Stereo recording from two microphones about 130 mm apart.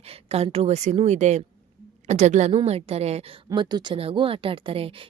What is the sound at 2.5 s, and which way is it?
Speech, 50° right (ahead or behind).